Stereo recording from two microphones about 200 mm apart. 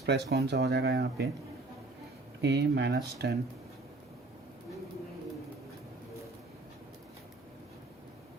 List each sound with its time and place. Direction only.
0.0 s speech: 55° right (ahead or behind)
2.4 s speech: 60° right (ahead or behind)